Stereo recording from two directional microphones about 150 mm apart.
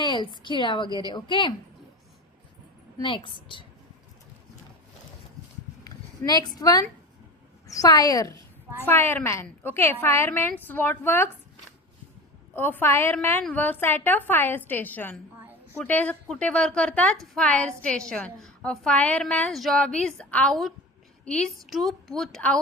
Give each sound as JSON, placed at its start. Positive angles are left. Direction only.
{"t": 0.0, "sound": "a sound", "side_deg": 30}
{"t": 0.5, "sound": "a woman's voice", "side_deg": 30}
{"t": 3.0, "sound": "a woman's voice", "side_deg": 35}
{"t": 5.8, "sound": "a sound", "side_deg": 25}
{"t": 6.6, "sound": "a woman's voice", "side_deg": 25}
{"t": 12.5, "sound": "a woman's voice", "side_deg": 15}